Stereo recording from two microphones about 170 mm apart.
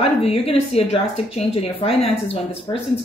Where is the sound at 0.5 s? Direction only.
35° left (ahead or behind).